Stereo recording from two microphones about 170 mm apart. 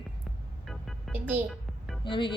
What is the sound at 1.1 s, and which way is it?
Speech, 10° right (ahead or behind).